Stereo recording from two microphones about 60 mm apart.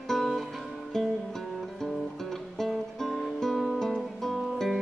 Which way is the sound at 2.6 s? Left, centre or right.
Centre.